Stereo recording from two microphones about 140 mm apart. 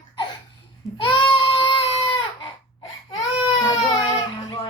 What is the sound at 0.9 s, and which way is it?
Baby cry, 35° left (ahead or behind).